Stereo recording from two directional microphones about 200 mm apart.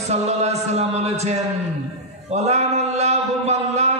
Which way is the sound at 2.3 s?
35° right (ahead or behind).